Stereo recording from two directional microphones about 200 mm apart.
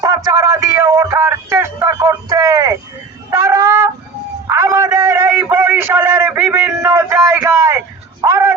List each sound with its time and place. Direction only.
0.0 s speech: 15° right (ahead or behind)
3.2 s a sound: 15° right (ahead or behind)
8.2 s music: 15° right (ahead or behind)